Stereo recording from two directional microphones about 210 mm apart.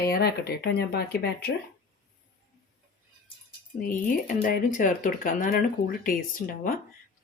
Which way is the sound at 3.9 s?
40° left (ahead or behind).